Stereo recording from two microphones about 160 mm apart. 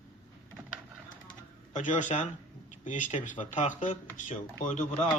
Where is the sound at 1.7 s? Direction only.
50° left (ahead or behind).